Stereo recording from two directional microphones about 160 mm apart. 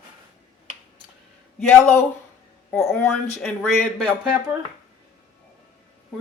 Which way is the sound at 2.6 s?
15° left (ahead or behind).